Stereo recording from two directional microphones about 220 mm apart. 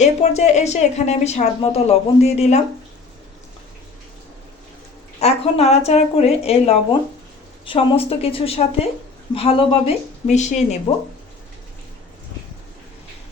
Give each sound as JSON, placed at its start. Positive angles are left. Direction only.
{"t": 0.0, "sound": "a woman's voice", "side_deg": 30}
{"t": 5.2, "sound": "a woman's voice", "side_deg": 30}